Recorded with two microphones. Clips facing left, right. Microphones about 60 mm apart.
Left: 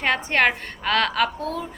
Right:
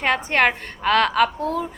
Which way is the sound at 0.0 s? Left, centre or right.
Right.